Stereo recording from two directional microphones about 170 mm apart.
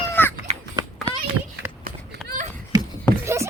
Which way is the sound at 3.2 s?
15° right (ahead or behind).